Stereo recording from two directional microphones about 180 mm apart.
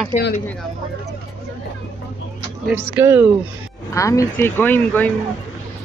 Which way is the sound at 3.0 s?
15° right (ahead or behind).